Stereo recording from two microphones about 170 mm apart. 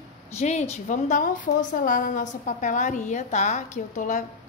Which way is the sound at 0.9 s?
50° left (ahead or behind).